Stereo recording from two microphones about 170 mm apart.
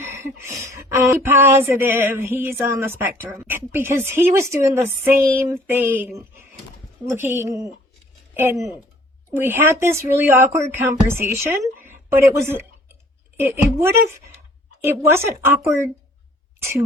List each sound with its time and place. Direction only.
0.0 s speech: 15° right (ahead or behind)
11.8 s a sound: 15° right (ahead or behind)
13.4 s speech: 15° right (ahead or behind)